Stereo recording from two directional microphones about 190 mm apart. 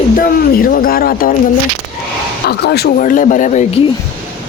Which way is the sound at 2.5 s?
55° left (ahead or behind).